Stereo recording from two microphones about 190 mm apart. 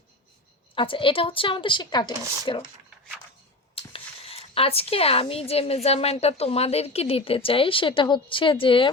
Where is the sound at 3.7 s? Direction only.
30° left (ahead or behind).